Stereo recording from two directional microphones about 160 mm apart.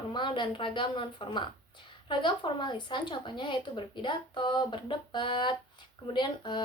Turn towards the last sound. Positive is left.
turn(degrees=30)  # may be behind; listen again after turning